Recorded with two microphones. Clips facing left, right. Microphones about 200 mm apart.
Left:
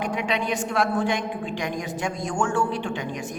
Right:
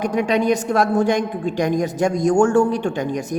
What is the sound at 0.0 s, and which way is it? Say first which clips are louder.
A woman's voice: right 8 dB; 40° right (ahead or behind).